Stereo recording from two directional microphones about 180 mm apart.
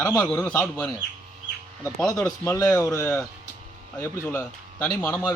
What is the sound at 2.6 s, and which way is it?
A man's voice, 5° left (ahead or behind).